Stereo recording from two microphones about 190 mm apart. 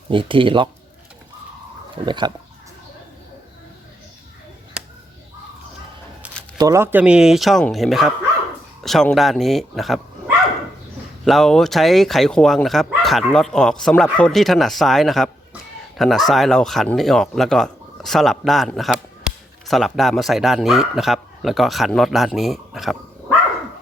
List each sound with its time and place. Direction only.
0.1 s speech: 25° right (ahead or behind)
2.0 s speech: 25° right (ahead or behind)
6.2 s a sound: 5° right (ahead or behind)
6.6 s speech: 15° right (ahead or behind); by 23.0 s centre (ahead or behind)